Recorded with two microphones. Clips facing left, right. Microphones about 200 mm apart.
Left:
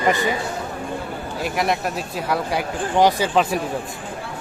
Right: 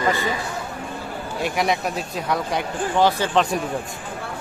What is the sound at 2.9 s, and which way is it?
Speech, 15° left (ahead or behind).